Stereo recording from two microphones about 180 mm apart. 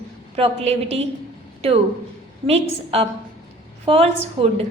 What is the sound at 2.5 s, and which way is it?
A woman's voice, 35° right (ahead or behind).